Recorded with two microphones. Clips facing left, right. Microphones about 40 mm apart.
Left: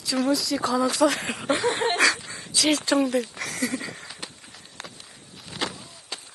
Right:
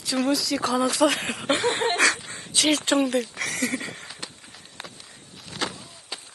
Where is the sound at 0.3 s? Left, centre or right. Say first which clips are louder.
Even; right.